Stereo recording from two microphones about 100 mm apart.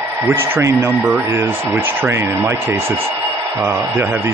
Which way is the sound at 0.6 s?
25° right (ahead or behind).